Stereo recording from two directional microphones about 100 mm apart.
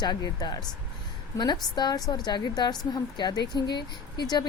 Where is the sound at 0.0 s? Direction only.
45° left (ahead or behind).